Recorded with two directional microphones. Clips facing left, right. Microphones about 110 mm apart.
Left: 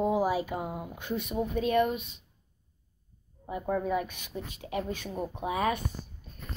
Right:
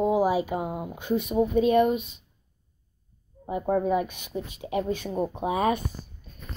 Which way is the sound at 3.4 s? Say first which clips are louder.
Right 6 dB; 25° right (ahead or behind).